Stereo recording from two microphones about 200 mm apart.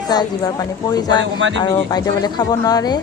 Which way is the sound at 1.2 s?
65° right (ahead or behind).